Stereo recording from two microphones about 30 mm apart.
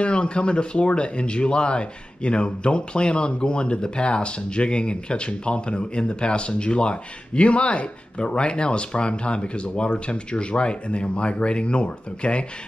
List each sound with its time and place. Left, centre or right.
0.0 s speech: left